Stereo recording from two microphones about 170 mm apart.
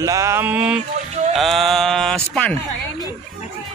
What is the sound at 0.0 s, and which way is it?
A man's voice, 20° right (ahead or behind).